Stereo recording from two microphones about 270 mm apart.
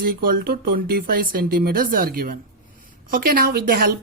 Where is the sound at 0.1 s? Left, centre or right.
Right.